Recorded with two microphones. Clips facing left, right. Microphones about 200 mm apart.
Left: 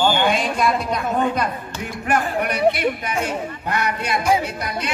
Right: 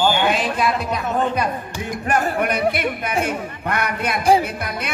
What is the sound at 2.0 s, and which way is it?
A man's voice, 45° right (ahead or behind).